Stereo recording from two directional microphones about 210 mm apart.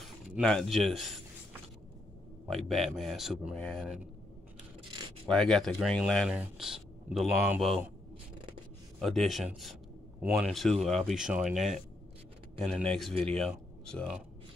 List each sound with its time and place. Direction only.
0.4 s speech: centre (ahead or behind)
4.9 s a sound: 20° right (ahead or behind)
5.3 s speech: centre (ahead or behind)
9.0 s speech: centre (ahead or behind)